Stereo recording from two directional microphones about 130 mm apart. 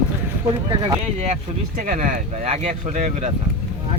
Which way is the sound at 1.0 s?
55° right (ahead or behind).